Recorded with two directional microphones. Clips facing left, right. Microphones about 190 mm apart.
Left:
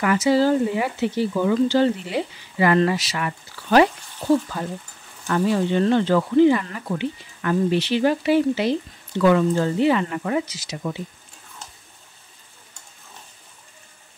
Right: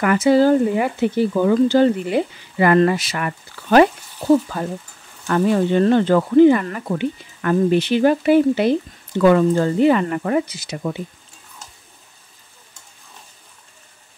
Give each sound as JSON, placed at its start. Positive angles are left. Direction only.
{"t": 0.0, "sound": "speech", "side_deg": -55}
{"t": 5.3, "sound": "speech", "side_deg": -50}